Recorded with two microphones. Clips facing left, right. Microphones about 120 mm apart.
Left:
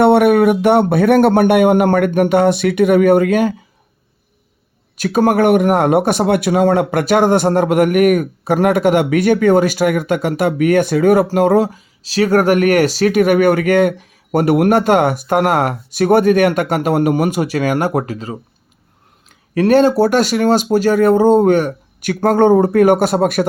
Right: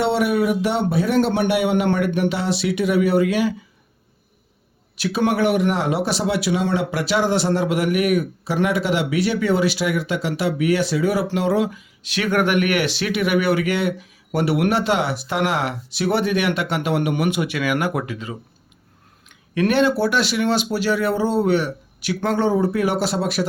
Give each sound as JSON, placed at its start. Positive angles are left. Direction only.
{"t": 0.0, "sound": "speech", "side_deg": 60}
{"t": 4.9, "sound": "speech", "side_deg": 45}